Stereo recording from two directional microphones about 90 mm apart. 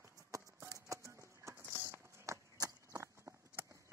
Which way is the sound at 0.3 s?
35° right (ahead or behind).